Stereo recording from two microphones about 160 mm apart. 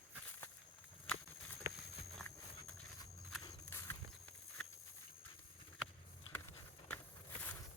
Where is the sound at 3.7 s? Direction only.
15° left (ahead or behind).